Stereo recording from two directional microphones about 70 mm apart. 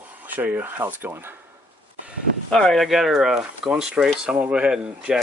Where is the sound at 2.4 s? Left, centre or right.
Centre.